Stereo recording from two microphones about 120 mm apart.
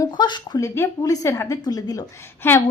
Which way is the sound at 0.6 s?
25° left (ahead or behind).